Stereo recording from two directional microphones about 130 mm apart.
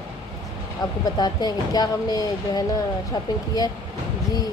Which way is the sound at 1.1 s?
30° left (ahead or behind).